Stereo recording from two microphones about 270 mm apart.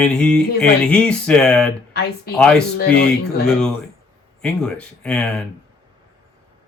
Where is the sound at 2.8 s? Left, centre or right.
Left.